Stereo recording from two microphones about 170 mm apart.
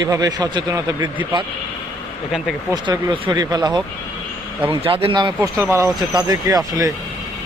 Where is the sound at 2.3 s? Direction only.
Centre (ahead or behind).